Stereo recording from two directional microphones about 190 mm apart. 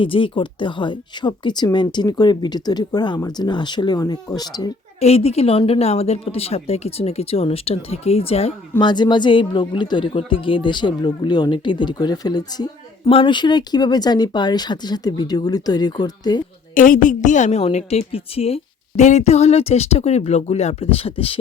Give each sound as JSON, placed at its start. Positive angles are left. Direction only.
{"t": 0.0, "sound": "speech", "side_deg": 25}
{"t": 4.9, "sound": "a woman's voice", "side_deg": 35}
{"t": 16.7, "sound": "a woman's voice", "side_deg": 45}